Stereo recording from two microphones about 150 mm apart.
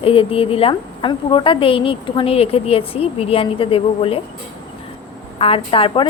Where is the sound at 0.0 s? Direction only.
40° left (ahead or behind).